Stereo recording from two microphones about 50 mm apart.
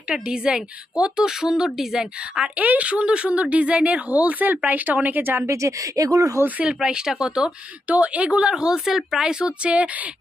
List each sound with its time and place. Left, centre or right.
0.1 s a woman's voice: centre
2.6 s a woman's voice: right
5.5 s speech: right
6.4 s speech: right
6.7 s a woman's voice: centre
7.9 s a woman's voice: right